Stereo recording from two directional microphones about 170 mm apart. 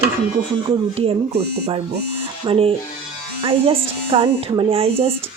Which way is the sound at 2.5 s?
35° right (ahead or behind).